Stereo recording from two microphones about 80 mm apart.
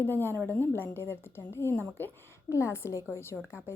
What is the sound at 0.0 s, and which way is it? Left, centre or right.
A woman's voice, left.